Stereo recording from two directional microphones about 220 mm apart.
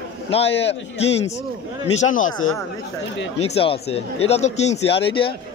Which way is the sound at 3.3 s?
25° left (ahead or behind).